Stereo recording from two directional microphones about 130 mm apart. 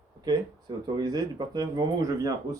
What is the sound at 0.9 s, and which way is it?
Speech, 30° right (ahead or behind).